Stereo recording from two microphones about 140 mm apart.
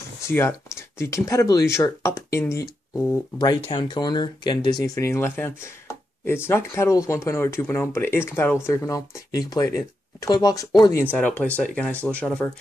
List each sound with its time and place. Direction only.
0.2 s speech: 20° left (ahead or behind)
3.6 s speech: 35° left (ahead or behind)
11.0 s speech: 10° left (ahead or behind)